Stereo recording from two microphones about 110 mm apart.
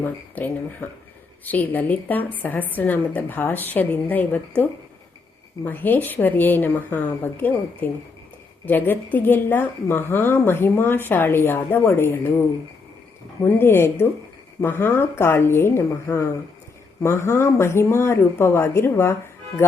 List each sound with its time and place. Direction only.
0.0 s a woman's voice: 15° left (ahead or behind)
13.4 s a woman's voice: 20° left (ahead or behind)